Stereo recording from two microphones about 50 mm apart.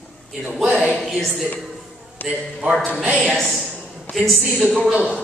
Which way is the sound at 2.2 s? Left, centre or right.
Left.